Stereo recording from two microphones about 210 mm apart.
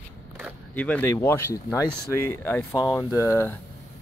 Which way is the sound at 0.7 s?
5° left (ahead or behind).